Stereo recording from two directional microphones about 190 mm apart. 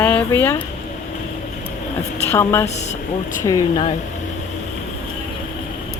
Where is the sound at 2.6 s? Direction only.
35° left (ahead or behind).